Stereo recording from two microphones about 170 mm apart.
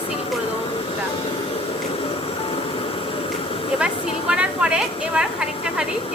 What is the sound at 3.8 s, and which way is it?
A woman's voice, 5° right (ahead or behind).